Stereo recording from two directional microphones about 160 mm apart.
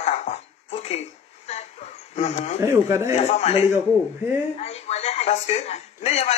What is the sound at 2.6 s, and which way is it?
Speech, 15° right (ahead or behind).